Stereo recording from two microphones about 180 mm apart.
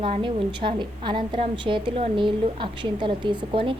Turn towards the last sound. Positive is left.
turn(degrees=-25)  # may be behind; listen again after turning